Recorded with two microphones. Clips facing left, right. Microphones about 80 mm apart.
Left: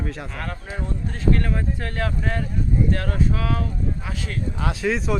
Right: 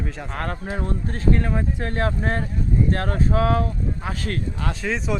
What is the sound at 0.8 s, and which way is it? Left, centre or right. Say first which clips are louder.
Speech: right 2 dB; right.